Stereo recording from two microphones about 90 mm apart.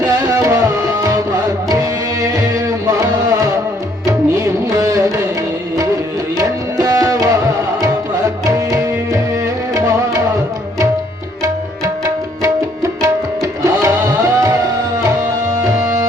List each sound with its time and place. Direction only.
0.0 s music: 40° right (ahead or behind)
6.3 s tabla: 40° right (ahead or behind)
8.4 s tabla: 40° right (ahead or behind)
9.7 s music: 40° right (ahead or behind)
13.0 s tabla: 35° right (ahead or behind)
15.6 s music: 40° right (ahead or behind)